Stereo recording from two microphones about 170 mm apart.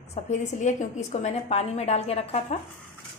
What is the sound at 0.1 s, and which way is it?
A woman's voice, 40° left (ahead or behind).